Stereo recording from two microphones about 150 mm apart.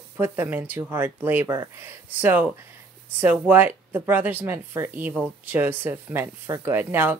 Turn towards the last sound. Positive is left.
turn(degrees=-15)  # may be behind; listen again after turning